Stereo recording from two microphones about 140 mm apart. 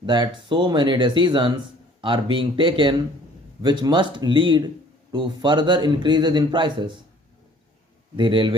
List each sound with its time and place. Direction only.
0.0 s speech: 30° right (ahead or behind)
8.1 s speech: 35° right (ahead or behind)